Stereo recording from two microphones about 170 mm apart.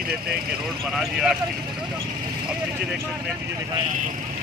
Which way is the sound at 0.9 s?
5° right (ahead or behind).